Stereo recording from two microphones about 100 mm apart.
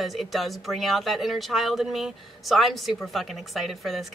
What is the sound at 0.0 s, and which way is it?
Speech, centre (ahead or behind).